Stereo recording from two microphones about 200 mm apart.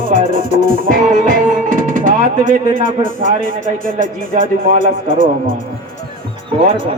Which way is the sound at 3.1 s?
40° right (ahead or behind).